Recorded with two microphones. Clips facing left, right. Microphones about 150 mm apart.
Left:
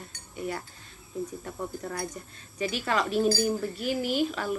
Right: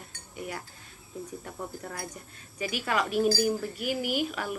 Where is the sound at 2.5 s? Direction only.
10° right (ahead or behind).